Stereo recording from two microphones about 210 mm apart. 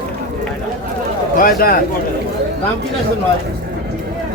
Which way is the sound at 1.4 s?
45° left (ahead or behind).